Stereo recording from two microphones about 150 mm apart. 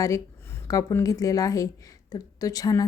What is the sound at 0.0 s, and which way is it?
A woman's voice, 20° left (ahead or behind).